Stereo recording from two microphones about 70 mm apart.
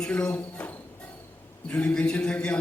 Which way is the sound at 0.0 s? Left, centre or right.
Centre.